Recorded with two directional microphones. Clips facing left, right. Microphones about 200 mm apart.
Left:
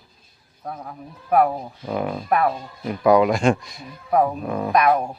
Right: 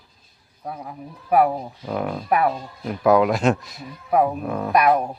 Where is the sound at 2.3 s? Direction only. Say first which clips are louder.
Right 1 dB; 10° right (ahead or behind).